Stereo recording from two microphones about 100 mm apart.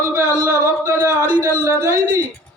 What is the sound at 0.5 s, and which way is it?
A man's voice, 30° right (ahead or behind).